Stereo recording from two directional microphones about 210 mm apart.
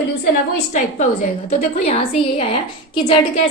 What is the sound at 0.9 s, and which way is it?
A woman's voice, 30° left (ahead or behind).